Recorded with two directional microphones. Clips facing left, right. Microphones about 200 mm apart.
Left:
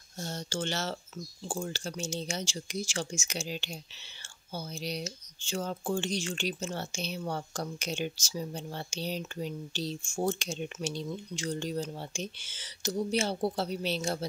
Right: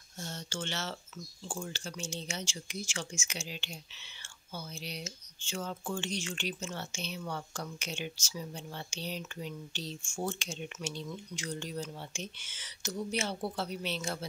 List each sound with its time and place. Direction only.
0.2 s speech: 40° left (ahead or behind)